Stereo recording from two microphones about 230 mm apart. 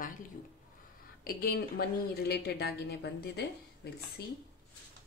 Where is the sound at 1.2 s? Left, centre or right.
Left.